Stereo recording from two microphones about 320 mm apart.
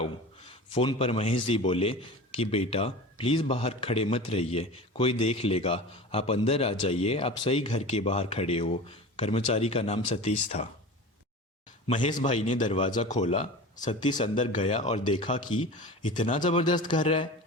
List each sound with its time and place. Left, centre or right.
0.0 s a man's voice: centre
11.9 s a man's voice: centre